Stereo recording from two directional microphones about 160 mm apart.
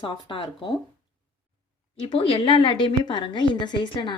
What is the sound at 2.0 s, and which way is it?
A woman's voice, 35° left (ahead or behind).